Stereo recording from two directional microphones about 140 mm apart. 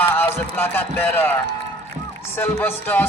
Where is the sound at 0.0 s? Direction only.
15° left (ahead or behind).